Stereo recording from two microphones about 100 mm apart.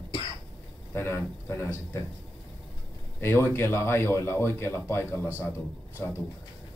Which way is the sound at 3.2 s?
25° left (ahead or behind).